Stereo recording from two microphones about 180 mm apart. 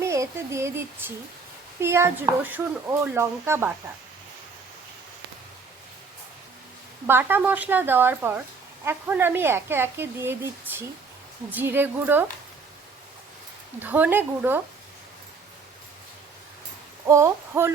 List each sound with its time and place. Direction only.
0.0 s speech: 15° right (ahead or behind)
7.1 s speech: 10° right (ahead or behind)
11.5 s speech: 10° right (ahead or behind)
13.8 s speech: 10° right (ahead or behind)
17.1 s speech: 15° right (ahead or behind)